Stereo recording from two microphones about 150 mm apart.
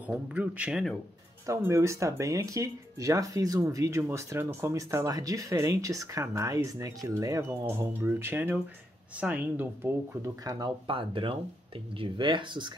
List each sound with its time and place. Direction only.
0.0 s speech: 10° right (ahead or behind)
1.4 s speech: 20° right (ahead or behind)